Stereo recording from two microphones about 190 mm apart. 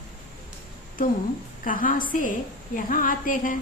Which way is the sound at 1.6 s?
45° left (ahead or behind).